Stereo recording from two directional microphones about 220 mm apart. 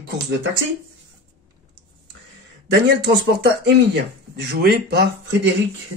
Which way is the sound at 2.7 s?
45° right (ahead or behind).